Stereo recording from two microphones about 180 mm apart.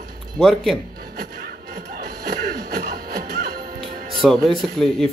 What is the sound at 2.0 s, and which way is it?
Music, 60° right (ahead or behind).